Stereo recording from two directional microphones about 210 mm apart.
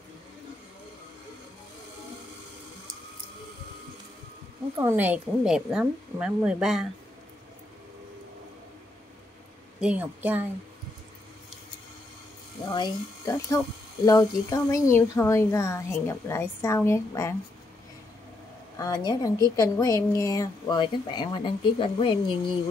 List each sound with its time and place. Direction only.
4.7 s speech: 10° right (ahead or behind)
9.8 s a woman's voice: 5° right (ahead or behind)
12.6 s a woman's voice: 20° left (ahead or behind)
18.8 s a woman's voice: 20° left (ahead or behind)